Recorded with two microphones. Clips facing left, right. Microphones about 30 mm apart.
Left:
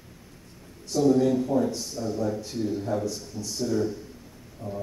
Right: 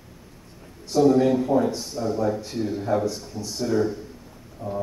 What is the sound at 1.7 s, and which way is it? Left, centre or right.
Speech, right.